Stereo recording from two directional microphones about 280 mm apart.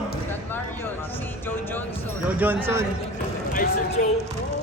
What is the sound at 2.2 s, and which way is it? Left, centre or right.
Speech, centre.